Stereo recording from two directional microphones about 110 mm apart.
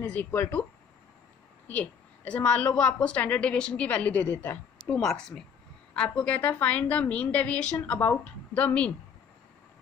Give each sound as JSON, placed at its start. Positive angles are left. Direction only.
{"t": 0.0, "sound": "a woman's voice", "side_deg": 15}
{"t": 1.7, "sound": "a woman's voice", "side_deg": 10}